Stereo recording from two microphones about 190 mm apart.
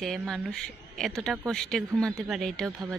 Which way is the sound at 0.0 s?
Centre (ahead or behind).